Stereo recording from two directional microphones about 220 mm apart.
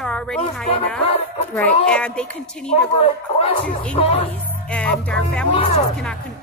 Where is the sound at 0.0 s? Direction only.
5° left (ahead or behind).